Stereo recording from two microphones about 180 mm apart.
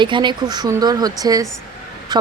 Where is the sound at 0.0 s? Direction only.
25° right (ahead or behind).